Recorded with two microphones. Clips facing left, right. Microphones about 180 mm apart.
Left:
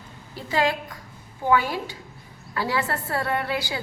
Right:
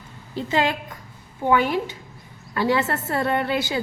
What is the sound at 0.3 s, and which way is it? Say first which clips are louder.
A woman's voice: right 2 dB; 25° right (ahead or behind).